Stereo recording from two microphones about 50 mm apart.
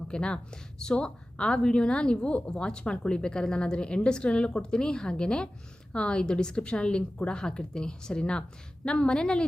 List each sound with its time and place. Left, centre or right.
0.1 s a woman's voice: centre